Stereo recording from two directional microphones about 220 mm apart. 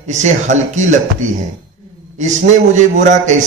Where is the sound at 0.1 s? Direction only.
30° right (ahead or behind).